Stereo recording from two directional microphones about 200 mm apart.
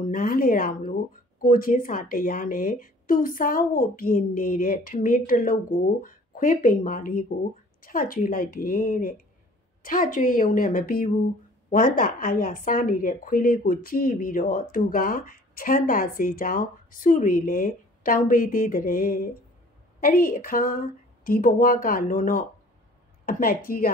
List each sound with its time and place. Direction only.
0.0 s speech: 45° left (ahead or behind)